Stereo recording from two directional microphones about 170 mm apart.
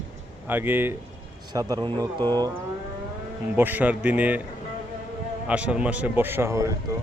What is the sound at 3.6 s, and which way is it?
Speech, 10° right (ahead or behind).